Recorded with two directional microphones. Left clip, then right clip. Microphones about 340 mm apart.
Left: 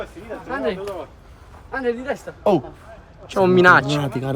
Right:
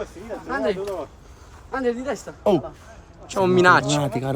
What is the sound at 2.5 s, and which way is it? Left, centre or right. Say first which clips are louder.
Speech: left 2 dB; centre.